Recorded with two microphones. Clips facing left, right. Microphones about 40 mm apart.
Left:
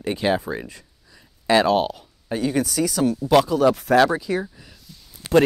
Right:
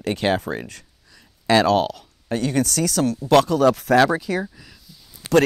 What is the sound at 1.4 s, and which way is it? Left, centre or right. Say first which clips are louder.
Speech: right 1 dB; right.